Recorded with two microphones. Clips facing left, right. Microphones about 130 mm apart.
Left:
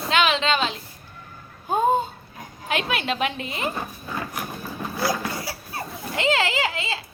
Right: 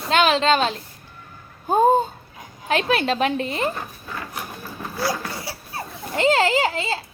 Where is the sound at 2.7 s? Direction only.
35° right (ahead or behind).